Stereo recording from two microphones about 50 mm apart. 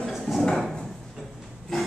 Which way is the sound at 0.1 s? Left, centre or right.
Centre.